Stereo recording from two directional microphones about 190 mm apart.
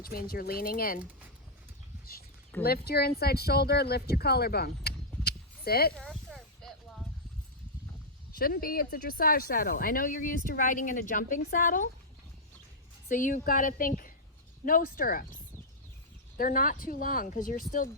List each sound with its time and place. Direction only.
0.0 s speech: 50° left (ahead or behind)
2.6 s speech: 55° left (ahead or behind)
6.0 s a sound: centre (ahead or behind)
8.4 s speech: 50° left (ahead or behind)
13.1 s speech: 45° left (ahead or behind)
16.4 s speech: 45° left (ahead or behind)